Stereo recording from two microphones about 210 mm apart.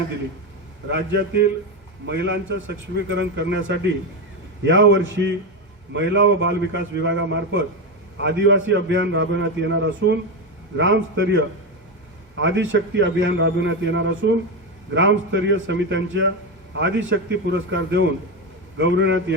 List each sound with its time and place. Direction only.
0.9 s a man's voice: 55° right (ahead or behind)